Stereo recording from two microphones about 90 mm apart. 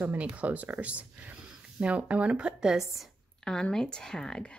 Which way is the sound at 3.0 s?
10° left (ahead or behind).